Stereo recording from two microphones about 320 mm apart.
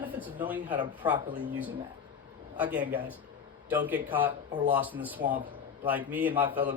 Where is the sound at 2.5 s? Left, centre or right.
Centre.